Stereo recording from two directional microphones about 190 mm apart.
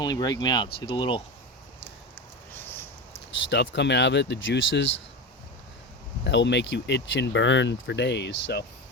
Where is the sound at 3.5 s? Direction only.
65° left (ahead or behind).